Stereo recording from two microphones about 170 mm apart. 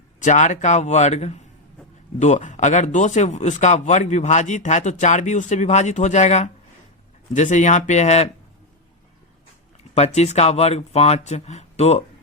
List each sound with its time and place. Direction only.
0.2 s speech: 45° left (ahead or behind)
9.9 s speech: 40° left (ahead or behind)